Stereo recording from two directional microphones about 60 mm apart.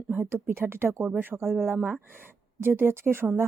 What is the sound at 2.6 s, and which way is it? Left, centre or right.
Speech, right.